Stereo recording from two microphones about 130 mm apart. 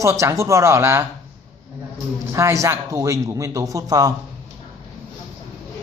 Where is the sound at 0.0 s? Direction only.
25° right (ahead or behind).